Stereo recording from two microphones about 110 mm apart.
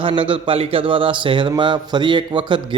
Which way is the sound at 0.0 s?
50° right (ahead or behind).